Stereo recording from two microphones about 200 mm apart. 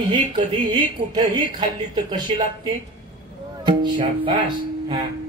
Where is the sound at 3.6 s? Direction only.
25° right (ahead or behind).